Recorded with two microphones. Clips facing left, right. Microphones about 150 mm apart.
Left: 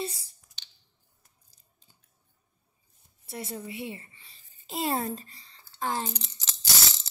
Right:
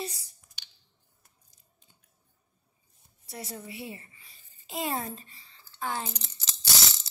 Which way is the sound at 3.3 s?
25° left (ahead or behind).